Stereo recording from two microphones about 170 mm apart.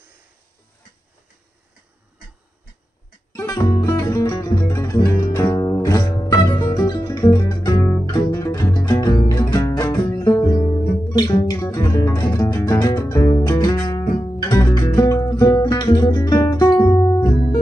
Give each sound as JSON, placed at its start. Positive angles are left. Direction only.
{"t": 3.3, "sound": "music", "side_deg": 20}
{"t": 6.7, "sound": "guitar", "side_deg": 25}
{"t": 8.2, "sound": "music", "side_deg": 25}
{"t": 9.3, "sound": "guitar", "side_deg": 25}
{"t": 11.1, "sound": "music", "side_deg": 25}